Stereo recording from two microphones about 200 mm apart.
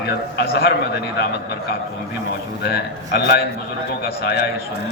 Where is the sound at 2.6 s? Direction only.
50° left (ahead or behind).